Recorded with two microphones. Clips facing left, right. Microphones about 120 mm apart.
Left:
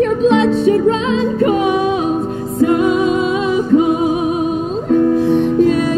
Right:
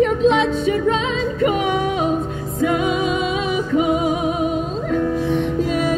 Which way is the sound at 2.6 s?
55° left (ahead or behind).